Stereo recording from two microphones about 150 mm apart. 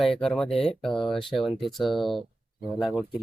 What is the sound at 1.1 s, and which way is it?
Speech, 35° left (ahead or behind).